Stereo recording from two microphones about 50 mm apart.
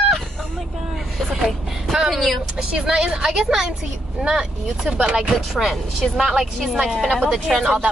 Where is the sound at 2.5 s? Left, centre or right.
Centre.